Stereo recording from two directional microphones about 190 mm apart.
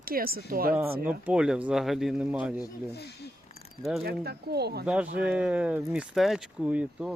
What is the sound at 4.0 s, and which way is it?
Speech, 55° right (ahead or behind).